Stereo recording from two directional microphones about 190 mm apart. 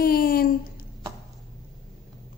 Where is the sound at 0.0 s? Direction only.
50° left (ahead or behind).